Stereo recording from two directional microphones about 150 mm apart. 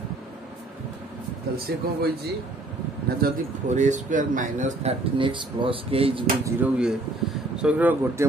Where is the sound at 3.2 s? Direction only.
80° right.